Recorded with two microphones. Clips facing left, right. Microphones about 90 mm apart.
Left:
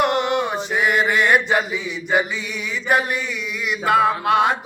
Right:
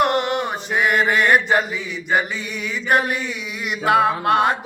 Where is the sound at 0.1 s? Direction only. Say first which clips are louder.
Even; 50° right (ahead or behind).